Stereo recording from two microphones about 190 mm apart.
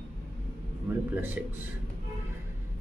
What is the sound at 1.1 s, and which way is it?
Speech, 5° right (ahead or behind).